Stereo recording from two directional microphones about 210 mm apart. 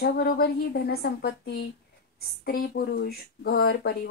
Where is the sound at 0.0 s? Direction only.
50° left (ahead or behind).